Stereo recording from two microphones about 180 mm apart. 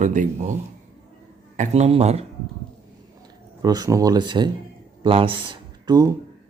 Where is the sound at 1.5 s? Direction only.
40° right (ahead or behind).